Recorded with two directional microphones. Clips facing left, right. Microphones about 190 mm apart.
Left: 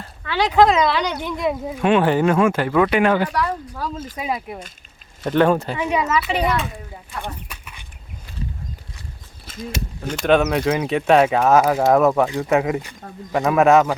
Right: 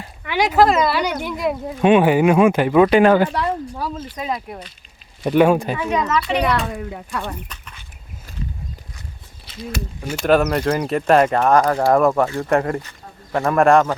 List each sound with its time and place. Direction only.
0.0 s speech: 10° right (ahead or behind)
1.8 s speech: 15° right (ahead or behind)
2.9 s speech: 35° right (ahead or behind)
4.2 s speech: 5° left (ahead or behind)
5.2 s speech: 10° right (ahead or behind)
5.7 s speech: 20° left (ahead or behind)
6.0 s speech: 5° left (ahead or behind)
6.7 s speech: 70° right (ahead or behind)
7.2 s dog: 10° left (ahead or behind)
9.5 s a sound: 50° left (ahead or behind)
10.2 s speech: centre (ahead or behind)